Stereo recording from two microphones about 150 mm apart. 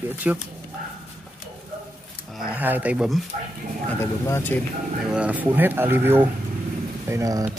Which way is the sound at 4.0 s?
15° left (ahead or behind).